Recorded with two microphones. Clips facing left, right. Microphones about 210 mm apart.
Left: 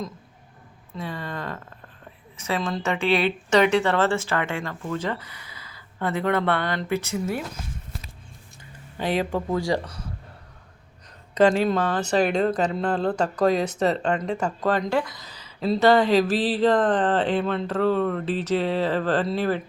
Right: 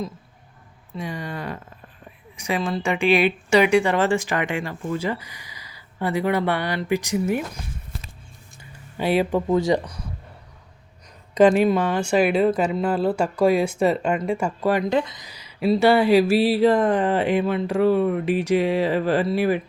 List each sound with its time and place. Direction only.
0.9 s speech: 15° right (ahead or behind)
9.0 s speech: 10° right (ahead or behind)
11.3 s speech: 15° right (ahead or behind)